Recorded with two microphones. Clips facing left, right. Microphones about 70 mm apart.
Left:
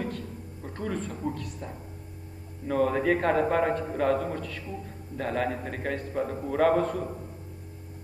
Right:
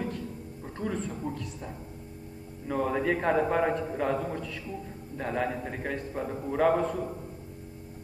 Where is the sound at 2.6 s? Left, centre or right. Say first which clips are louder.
Left 3 dB; left.